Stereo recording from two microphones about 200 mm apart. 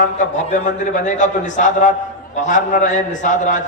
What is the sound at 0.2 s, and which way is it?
A man's voice, 40° left (ahead or behind).